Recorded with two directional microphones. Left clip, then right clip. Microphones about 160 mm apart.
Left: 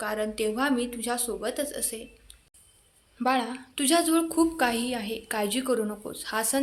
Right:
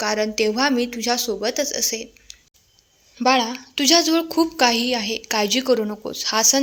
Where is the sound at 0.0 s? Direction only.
35° right (ahead or behind).